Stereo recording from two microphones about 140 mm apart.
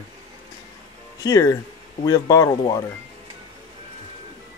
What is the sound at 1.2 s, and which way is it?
Speech, 25° left (ahead or behind).